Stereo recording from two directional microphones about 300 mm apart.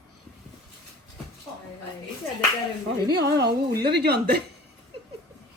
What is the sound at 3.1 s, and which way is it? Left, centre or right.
Speech, right.